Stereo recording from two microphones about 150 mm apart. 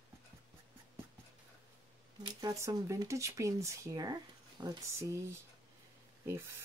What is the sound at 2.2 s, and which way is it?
Speech, 20° right (ahead or behind).